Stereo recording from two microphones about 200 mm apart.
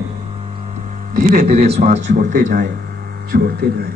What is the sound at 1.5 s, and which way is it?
Speech, 30° right (ahead or behind).